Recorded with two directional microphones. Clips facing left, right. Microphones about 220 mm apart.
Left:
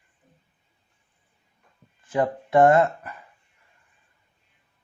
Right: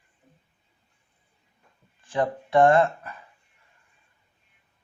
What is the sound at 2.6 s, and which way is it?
Speech, 20° left (ahead or behind).